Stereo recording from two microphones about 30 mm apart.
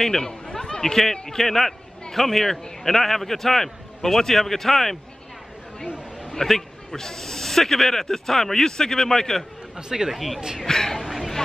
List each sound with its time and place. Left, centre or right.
0.0 s a man's voice: centre
6.3 s a man's voice: centre
9.8 s speech: right
10.1 s speech: centre
10.7 s a man's voice: centre
11.1 s a sound: centre